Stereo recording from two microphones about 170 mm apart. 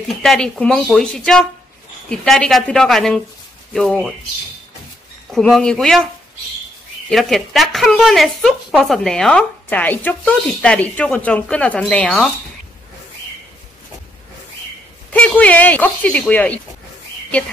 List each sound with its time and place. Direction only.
0.1 s speech: centre (ahead or behind)
5.3 s speech: 5° left (ahead or behind)
7.1 s speech: centre (ahead or behind)
15.0 s speech: 10° left (ahead or behind)